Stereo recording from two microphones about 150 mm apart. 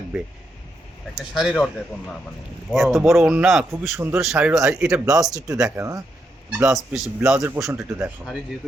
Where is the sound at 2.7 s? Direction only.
Centre (ahead or behind).